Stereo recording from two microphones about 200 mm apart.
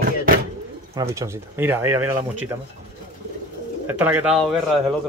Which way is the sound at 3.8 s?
10° right (ahead or behind).